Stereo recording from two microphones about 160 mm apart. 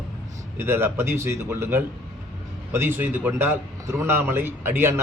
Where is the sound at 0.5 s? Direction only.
15° right (ahead or behind).